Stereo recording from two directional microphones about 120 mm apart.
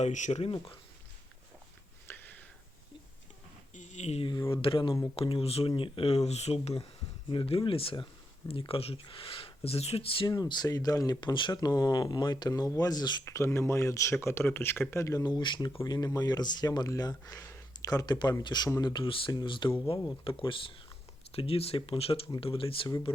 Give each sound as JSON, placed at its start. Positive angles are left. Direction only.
{"t": 0.0, "sound": "speech", "side_deg": 80}
{"t": 2.0, "sound": "a sound", "side_deg": 15}
{"t": 3.8, "sound": "a sound", "side_deg": 80}
{"t": 4.2, "sound": "speech", "side_deg": 40}
{"t": 7.3, "sound": "speech", "side_deg": 50}
{"t": 10.3, "sound": "speech", "side_deg": 35}
{"t": 13.2, "sound": "speech", "side_deg": 25}
{"t": 15.4, "sound": "speech", "side_deg": 40}
{"t": 19.0, "sound": "speech", "side_deg": 45}